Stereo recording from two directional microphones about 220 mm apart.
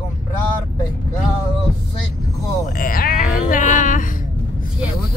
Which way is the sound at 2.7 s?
40° left (ahead or behind).